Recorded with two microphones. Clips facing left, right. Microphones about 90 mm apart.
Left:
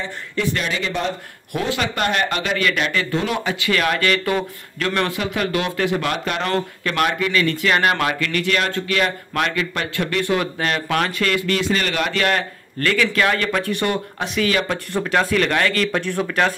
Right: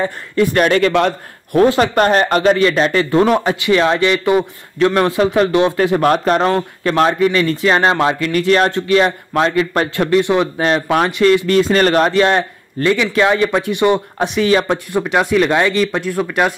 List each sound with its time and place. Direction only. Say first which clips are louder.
0.0 s speech: right 8 dB; 50° right (ahead or behind); by 1.1 s 65° right (ahead or behind)
1.5 s speech: right 11 dB; 40° right (ahead or behind)
3.6 s speech: right 5 dB; 25° right (ahead or behind); by 12.1 s 40° right (ahead or behind)
12.1 s speech: right 7 dB; 25° right (ahead or behind)
14.1 s speech: right 6 dB; 25° right (ahead or behind)
14.9 s speech: right 4 dB; 15° right (ahead or behind)